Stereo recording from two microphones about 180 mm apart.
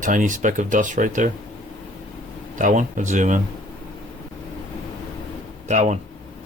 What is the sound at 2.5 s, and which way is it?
Speech, 45° right (ahead or behind).